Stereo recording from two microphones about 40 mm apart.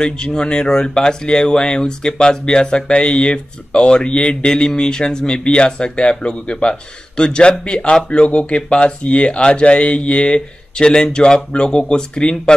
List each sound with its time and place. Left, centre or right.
0.0 s speech: left